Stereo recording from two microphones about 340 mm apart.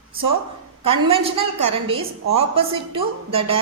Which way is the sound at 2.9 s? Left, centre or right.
Centre.